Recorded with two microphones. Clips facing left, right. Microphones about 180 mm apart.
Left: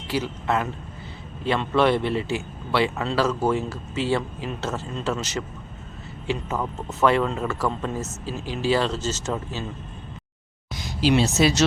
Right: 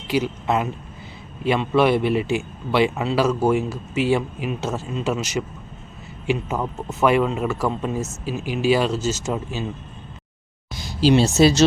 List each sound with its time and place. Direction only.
0.1 s a man's voice: 15° right (ahead or behind)
10.8 s speech: 30° right (ahead or behind)